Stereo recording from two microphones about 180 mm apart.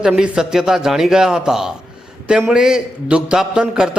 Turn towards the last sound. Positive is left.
turn(degrees=-5)  # may be behind; listen again after turning